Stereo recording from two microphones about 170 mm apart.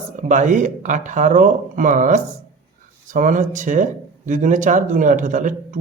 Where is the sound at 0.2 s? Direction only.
45° right (ahead or behind).